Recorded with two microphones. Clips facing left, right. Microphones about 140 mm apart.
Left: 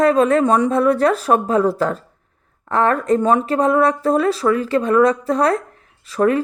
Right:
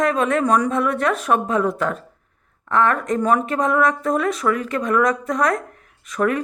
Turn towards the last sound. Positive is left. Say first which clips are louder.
# left 4 dB
turn(degrees=30)  # may be behind; listen again after turning